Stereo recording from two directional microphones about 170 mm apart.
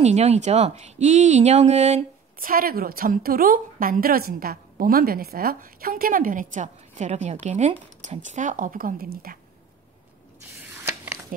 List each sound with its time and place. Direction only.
0.0 s speech: 40° right (ahead or behind)
2.5 s a woman's voice: 60° right (ahead or behind)
10.6 s a sound: 10° right (ahead or behind)